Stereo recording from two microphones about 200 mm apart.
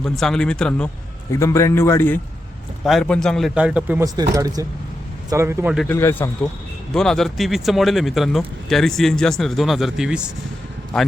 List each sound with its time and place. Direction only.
0.0 s a man's voice: 5° left (ahead or behind)
4.1 s speech: 20° right (ahead or behind)
5.8 s a man's voice: 10° left (ahead or behind); by 10.3 s 5° right (ahead or behind)